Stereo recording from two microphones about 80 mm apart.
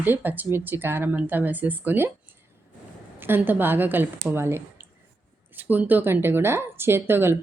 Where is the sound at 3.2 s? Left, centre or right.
Right.